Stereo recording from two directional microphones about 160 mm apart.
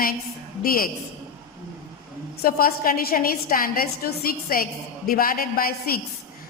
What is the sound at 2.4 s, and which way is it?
A woman's voice, 65° left (ahead or behind).